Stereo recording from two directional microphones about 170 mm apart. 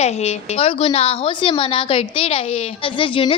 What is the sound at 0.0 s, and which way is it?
A woman's voice, 40° left (ahead or behind).